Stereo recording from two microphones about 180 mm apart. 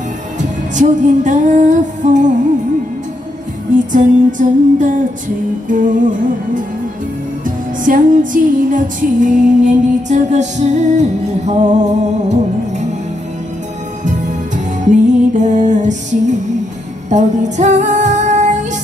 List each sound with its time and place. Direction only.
0.4 s music: 45° right (ahead or behind)
3.7 s music: 45° right (ahead or behind)
14.9 s music: 45° right (ahead or behind)